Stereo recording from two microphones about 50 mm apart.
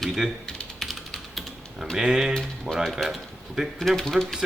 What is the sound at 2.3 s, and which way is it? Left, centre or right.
Speech, centre.